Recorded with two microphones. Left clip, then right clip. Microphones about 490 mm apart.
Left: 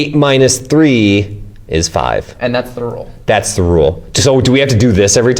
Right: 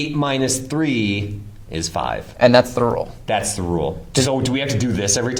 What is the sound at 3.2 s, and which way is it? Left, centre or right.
Speech, left.